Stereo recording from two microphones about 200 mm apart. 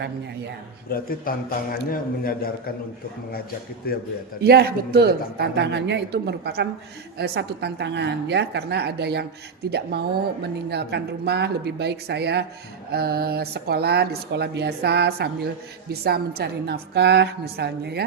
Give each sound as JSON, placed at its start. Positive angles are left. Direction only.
{"t": 0.9, "sound": "a man's voice", "side_deg": 45}
{"t": 3.9, "sound": "a man's voice", "side_deg": 50}
{"t": 4.4, "sound": "speech", "side_deg": -55}